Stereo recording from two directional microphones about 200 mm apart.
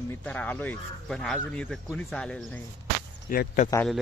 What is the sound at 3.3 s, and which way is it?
Speech, 45° left (ahead or behind).